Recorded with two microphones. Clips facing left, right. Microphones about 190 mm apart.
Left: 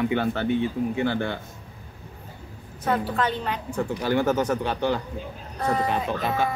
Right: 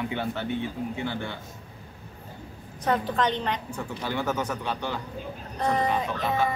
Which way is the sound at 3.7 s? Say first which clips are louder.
Left 7 dB; 40° left (ahead or behind).